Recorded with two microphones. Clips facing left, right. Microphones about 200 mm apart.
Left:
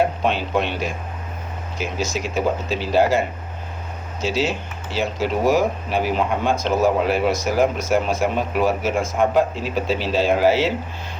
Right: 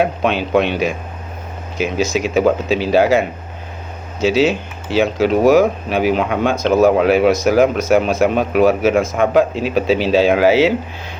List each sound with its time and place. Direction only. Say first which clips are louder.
0.0 s speech: right 3 dB; 75° right (ahead or behind)
2.1 s speech: right 8 dB; 75° right (ahead or behind)